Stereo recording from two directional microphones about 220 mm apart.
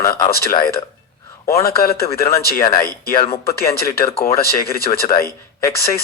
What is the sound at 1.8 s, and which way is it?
Speech, 45° left (ahead or behind).